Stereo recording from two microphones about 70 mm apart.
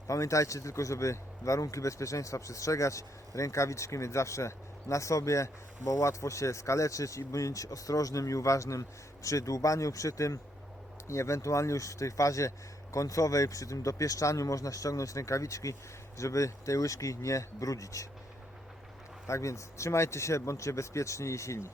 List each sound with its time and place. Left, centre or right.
0.1 s speech: left
19.3 s speech: left